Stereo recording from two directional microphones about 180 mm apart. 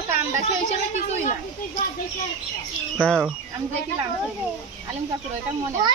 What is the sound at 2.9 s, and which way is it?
Speech, 5° left (ahead or behind).